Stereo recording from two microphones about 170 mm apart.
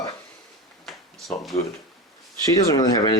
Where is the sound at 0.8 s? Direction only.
Centre (ahead or behind).